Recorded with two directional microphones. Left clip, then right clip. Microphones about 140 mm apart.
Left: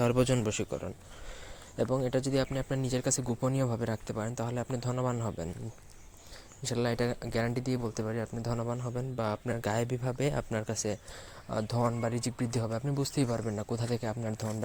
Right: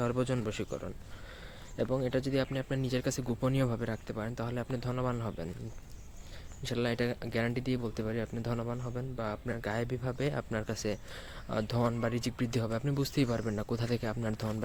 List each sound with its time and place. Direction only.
0.0 s a man's voice: 20° left (ahead or behind); by 3.8 s 15° right (ahead or behind)
3.8 s speech: 5° left (ahead or behind)
6.7 s speech: 5° right (ahead or behind)
8.0 s speech: 25° right (ahead or behind)
8.4 s speech: 10° right (ahead or behind)
9.0 s speech: 15° left (ahead or behind); by 14.6 s 15° right (ahead or behind)